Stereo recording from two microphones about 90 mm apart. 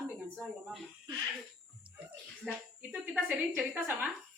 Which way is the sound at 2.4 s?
5° left (ahead or behind).